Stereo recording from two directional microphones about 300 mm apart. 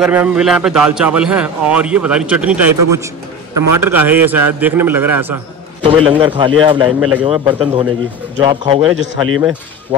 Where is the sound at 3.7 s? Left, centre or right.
Centre.